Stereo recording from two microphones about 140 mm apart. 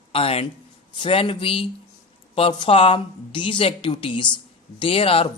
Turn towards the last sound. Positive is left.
turn(degrees=40)  # may be behind; listen again after turning